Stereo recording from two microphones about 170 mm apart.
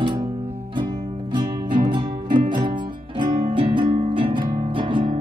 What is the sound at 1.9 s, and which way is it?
Music, 30° right (ahead or behind).